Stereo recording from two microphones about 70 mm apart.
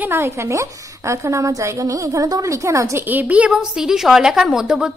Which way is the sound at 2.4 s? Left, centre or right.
Right.